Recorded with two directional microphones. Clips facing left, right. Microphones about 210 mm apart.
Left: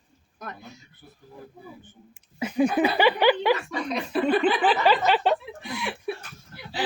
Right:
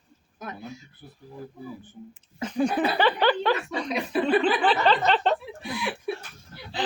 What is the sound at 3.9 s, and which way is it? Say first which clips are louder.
Speech: even; 10° right (ahead or behind).